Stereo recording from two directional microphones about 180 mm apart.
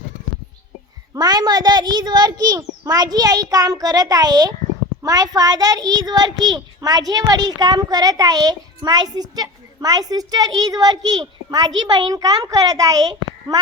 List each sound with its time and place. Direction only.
1.1 s a child's voice: 20° right (ahead or behind)